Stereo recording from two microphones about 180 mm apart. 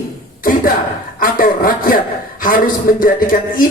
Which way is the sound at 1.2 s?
50° left (ahead or behind).